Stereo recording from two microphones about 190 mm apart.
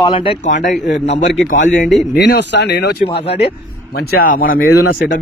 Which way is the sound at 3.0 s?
30° left (ahead or behind).